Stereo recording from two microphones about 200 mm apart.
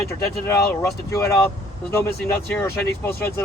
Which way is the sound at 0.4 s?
15° left (ahead or behind).